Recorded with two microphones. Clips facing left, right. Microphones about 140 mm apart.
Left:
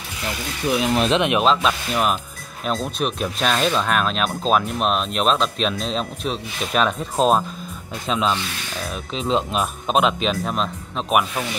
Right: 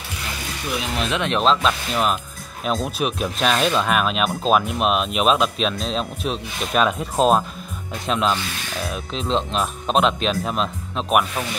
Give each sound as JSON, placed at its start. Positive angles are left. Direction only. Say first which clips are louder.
{"t": 1.1, "sound": "speech", "louder": "even", "side_deg": 15}
{"t": 1.4, "sound": "speech", "louder": "even", "side_deg": 5}